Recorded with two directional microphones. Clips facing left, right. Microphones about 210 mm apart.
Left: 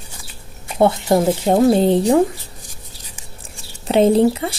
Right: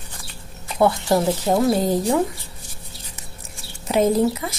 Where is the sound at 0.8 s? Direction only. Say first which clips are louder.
Left 3 dB; 25° left (ahead or behind).